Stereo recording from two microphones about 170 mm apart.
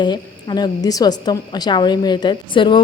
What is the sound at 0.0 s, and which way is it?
A woman's voice, 25° left (ahead or behind).